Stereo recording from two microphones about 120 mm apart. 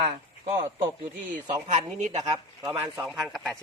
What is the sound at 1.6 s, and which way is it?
Speech, 80° right.